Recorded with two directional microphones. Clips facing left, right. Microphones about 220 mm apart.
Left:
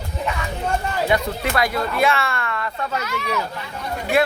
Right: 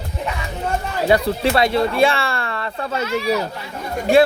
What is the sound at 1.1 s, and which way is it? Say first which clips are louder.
Speech: right 7 dB; 30° right (ahead or behind).